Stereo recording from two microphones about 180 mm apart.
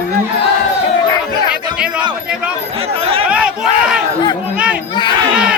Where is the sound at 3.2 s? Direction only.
5° right (ahead or behind).